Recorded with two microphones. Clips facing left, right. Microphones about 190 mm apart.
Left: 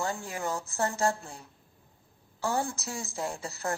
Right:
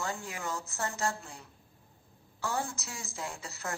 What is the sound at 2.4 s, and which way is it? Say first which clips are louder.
A woman's voice: left 4 dB; 35° left (ahead or behind).